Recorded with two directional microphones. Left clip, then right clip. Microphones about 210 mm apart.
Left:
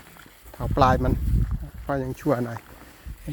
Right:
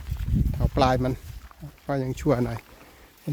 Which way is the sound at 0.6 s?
15° right (ahead or behind).